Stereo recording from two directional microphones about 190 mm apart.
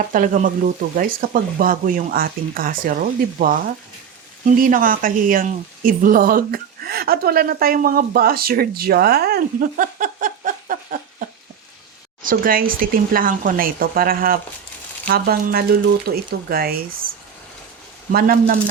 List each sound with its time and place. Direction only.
0.1 s a woman's voice: 45° right (ahead or behind)
12.2 s a woman's voice: 50° right (ahead or behind)
18.1 s a woman's voice: 50° right (ahead or behind)